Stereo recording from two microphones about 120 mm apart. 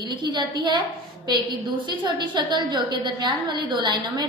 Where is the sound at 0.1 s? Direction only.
40° right (ahead or behind).